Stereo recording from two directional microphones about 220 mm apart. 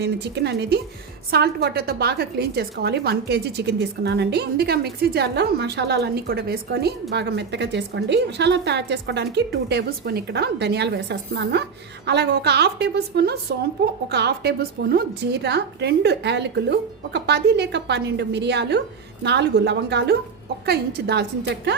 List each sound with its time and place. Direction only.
0.0 s a woman's voice: 50° right (ahead or behind)